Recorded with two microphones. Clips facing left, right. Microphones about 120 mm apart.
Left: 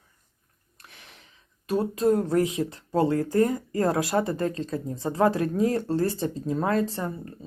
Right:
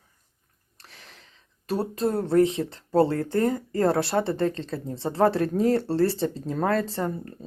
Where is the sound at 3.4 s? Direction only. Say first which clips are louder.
Right 1 dB; 40° right (ahead or behind).